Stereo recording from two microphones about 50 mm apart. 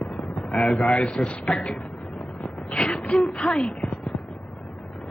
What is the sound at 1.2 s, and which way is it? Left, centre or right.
Speech, centre.